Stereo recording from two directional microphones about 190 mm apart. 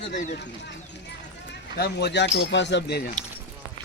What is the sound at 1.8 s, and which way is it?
Speech, 60° left (ahead or behind).